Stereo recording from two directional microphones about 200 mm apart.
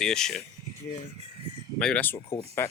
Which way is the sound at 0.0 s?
5° left (ahead or behind).